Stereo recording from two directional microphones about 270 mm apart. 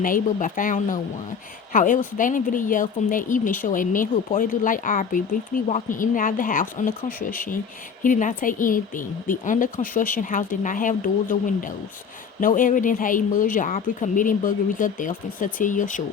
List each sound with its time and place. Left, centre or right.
0.0 s speech: left